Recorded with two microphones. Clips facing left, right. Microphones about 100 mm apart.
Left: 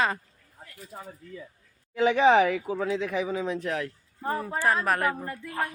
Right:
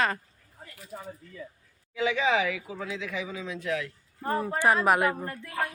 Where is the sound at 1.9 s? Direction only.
45° left (ahead or behind).